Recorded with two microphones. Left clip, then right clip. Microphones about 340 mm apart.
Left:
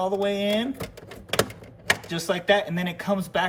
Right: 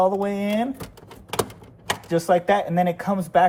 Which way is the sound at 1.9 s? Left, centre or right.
Centre.